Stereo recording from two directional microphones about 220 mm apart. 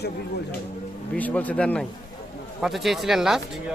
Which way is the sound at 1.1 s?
5° left (ahead or behind).